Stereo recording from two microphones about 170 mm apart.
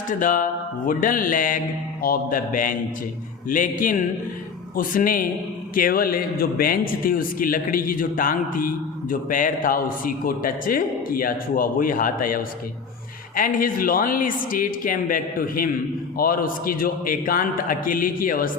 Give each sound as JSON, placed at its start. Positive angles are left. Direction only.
{"t": 0.1, "sound": "music", "side_deg": 50}
{"t": 2.0, "sound": "a man's voice", "side_deg": 55}
{"t": 3.5, "sound": "music", "side_deg": 50}
{"t": 4.7, "sound": "a man's voice", "side_deg": 55}